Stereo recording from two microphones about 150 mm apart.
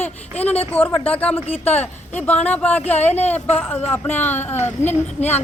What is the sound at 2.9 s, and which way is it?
Speech, 50° left (ahead or behind).